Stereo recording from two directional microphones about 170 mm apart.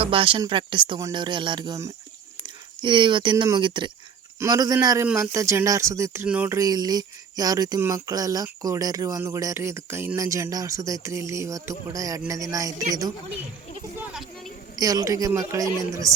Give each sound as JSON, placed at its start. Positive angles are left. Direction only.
{"t": 0.0, "sound": "speech", "side_deg": -30}
{"t": 6.6, "sound": "speech", "side_deg": -20}
{"t": 13.9, "sound": "a sound", "side_deg": -5}
{"t": 14.8, "sound": "speech", "side_deg": -20}